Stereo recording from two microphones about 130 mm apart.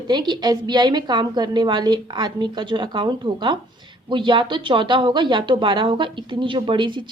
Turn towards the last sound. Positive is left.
turn(degrees=-40)  # may be behind; listen again after turning